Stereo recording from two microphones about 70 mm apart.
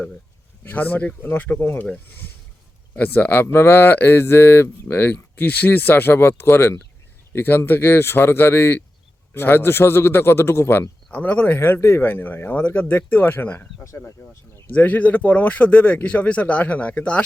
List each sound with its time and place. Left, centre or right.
0.6 s speech: left
2.9 s speech: left
11.1 s speech: centre
11.5 s speech: left
14.7 s speech: left